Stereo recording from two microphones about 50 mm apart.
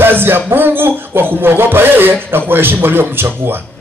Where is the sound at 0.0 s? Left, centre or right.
Right.